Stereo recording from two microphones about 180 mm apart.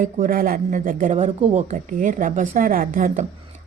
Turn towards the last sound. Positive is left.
turn(degrees=-50)  # may be behind; listen again after turning